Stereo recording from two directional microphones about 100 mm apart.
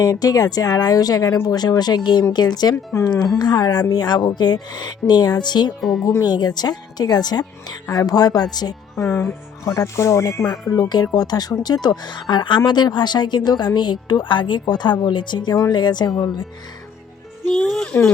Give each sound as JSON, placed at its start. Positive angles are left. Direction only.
{"t": 0.0, "sound": "speech", "side_deg": 40}
{"t": 9.0, "sound": "speech", "side_deg": 25}
{"t": 17.5, "sound": "speech", "side_deg": 5}